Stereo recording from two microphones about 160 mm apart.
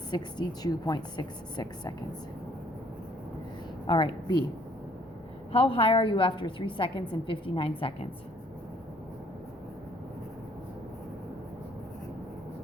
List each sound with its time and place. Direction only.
0.1 s a woman's voice: 25° left (ahead or behind)
3.8 s a woman's voice: 30° left (ahead or behind)
5.5 s a woman's voice: 35° left (ahead or behind)